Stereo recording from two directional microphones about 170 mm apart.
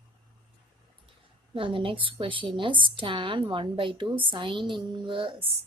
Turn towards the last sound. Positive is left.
turn(degrees=-30)  # may be behind; listen again after turning